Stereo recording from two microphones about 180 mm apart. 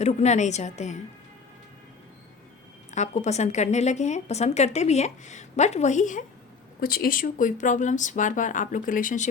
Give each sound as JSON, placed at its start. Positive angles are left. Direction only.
{"t": 0.0, "sound": "a woman's voice", "side_deg": 40}
{"t": 2.9, "sound": "a woman's voice", "side_deg": 40}
{"t": 6.7, "sound": "speech", "side_deg": 55}